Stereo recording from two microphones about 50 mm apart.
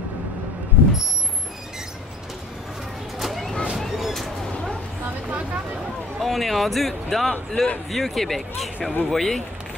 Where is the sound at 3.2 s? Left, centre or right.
Centre.